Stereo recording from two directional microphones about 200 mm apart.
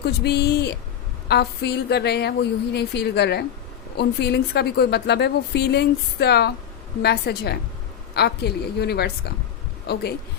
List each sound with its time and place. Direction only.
0.0 s a woman's voice: 55° left (ahead or behind)